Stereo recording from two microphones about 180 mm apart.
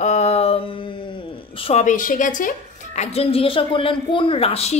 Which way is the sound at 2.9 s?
35° left (ahead or behind).